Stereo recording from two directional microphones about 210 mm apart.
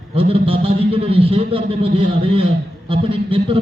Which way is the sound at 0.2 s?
25° right (ahead or behind).